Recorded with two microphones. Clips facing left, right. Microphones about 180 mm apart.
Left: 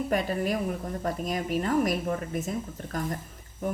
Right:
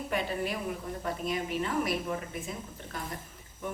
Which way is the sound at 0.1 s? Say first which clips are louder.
Left 3 dB; 45° left (ahead or behind).